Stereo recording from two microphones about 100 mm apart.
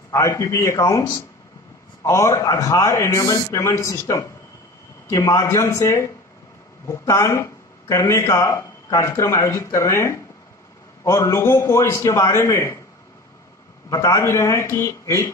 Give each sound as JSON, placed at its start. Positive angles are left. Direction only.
{"t": 0.1, "sound": "a man's voice", "side_deg": 30}
{"t": 3.3, "sound": "a man's voice", "side_deg": 40}
{"t": 3.5, "sound": "a man's voice", "side_deg": 30}
{"t": 13.8, "sound": "a man's voice", "side_deg": 35}